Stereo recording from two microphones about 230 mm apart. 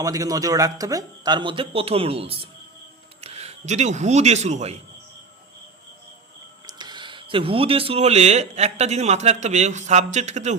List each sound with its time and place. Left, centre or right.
0.0 s a man's voice: centre
6.7 s speech: centre